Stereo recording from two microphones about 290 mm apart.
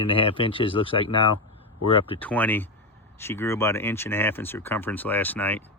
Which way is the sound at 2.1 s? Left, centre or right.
Centre.